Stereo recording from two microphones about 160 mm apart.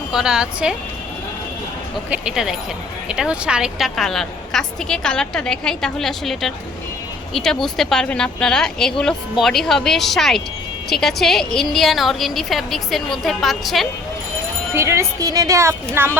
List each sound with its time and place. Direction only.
0.1 s a woman's voice: 5° right (ahead or behind)
2.0 s a woman's voice: 5° right (ahead or behind)
14.8 s a woman's voice: 15° right (ahead or behind)